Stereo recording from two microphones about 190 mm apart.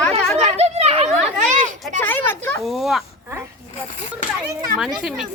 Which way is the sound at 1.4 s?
40° right (ahead or behind).